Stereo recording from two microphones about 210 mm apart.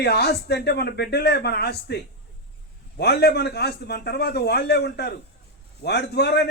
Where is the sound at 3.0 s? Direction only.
50° left (ahead or behind).